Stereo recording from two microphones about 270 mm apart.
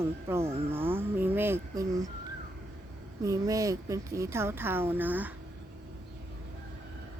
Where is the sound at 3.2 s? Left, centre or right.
Centre.